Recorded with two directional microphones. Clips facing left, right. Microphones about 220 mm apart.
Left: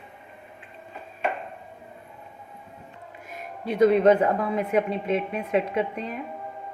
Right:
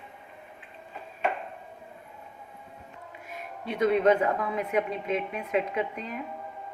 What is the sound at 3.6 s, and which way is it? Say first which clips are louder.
Speech: left 5 dB; 40° left (ahead or behind).